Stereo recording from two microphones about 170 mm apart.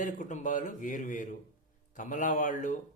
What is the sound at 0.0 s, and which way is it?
Speech, 45° left (ahead or behind).